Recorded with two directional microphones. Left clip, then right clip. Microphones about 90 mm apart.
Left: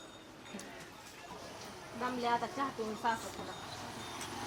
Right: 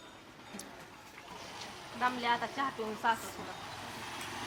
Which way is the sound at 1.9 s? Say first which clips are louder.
Right 3 dB; 30° right (ahead or behind).